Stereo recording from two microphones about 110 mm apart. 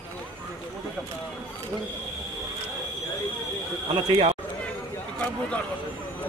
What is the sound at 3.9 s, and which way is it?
Speech, 55° right (ahead or behind).